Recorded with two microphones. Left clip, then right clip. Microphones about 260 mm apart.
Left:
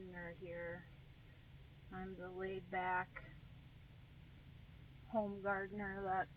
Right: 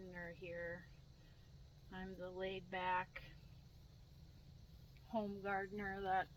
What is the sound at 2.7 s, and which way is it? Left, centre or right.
Speech, centre.